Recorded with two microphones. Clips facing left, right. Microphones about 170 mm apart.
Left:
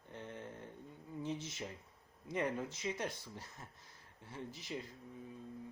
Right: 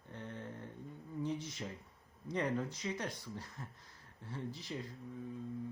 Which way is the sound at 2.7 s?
25° left (ahead or behind).